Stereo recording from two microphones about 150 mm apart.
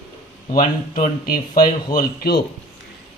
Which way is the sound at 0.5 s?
65° left (ahead or behind).